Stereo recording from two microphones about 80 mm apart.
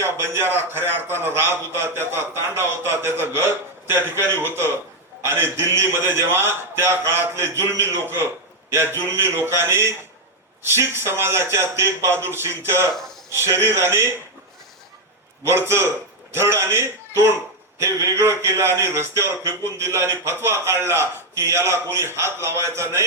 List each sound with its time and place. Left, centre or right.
0.0 s a man's voice: right
5.2 s a man's voice: right
15.4 s a man's voice: right